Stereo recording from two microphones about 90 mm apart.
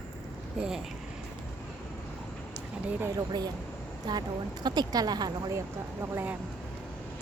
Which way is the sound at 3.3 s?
45° right (ahead or behind).